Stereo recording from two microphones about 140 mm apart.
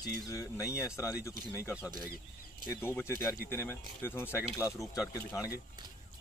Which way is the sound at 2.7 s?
20° left (ahead or behind).